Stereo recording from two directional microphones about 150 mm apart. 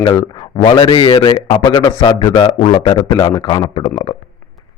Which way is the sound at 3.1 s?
25° left (ahead or behind).